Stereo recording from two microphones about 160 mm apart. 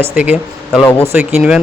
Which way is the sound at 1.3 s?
5° right (ahead or behind).